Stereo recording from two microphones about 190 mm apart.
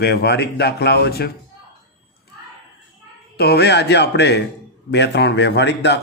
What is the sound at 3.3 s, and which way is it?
A man's voice, 60° left (ahead or behind).